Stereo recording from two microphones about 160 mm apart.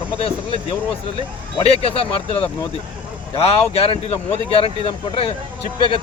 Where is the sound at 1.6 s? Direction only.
40° left (ahead or behind).